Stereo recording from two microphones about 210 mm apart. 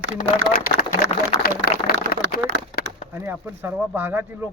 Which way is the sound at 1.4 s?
45° left (ahead or behind).